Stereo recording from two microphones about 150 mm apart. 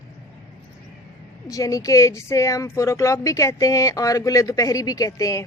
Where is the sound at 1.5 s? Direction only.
20° left (ahead or behind).